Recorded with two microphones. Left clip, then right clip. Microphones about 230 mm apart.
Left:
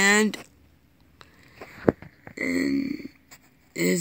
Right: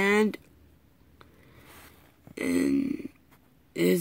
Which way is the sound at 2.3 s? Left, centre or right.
Centre.